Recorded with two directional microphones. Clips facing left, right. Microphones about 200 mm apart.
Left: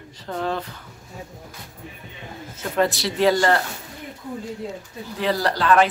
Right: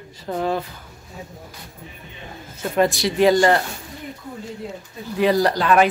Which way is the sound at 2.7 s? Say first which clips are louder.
Right 3 dB; 15° right (ahead or behind).